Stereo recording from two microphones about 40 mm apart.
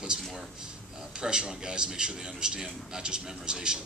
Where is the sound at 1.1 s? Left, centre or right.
Right.